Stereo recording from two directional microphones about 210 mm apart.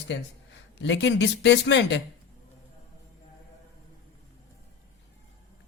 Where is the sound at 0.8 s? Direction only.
60° left (ahead or behind).